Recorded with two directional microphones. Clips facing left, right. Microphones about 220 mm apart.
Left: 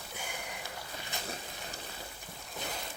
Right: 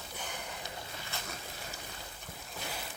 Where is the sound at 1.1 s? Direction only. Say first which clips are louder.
Left 2 dB; 15° left (ahead or behind).